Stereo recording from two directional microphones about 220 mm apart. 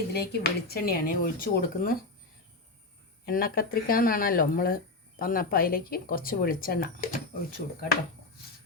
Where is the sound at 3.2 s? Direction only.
40° left (ahead or behind).